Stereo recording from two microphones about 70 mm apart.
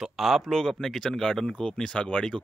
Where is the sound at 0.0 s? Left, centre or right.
Centre.